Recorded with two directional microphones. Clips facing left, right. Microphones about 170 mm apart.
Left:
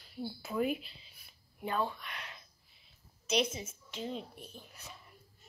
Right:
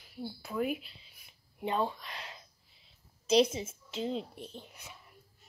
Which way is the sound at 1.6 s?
25° right (ahead or behind).